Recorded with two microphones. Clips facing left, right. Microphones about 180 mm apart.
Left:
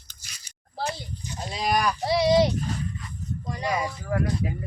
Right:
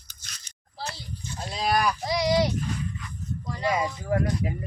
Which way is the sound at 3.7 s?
25° right (ahead or behind).